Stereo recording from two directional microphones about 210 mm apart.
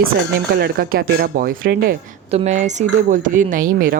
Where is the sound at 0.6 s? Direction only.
45° right (ahead or behind).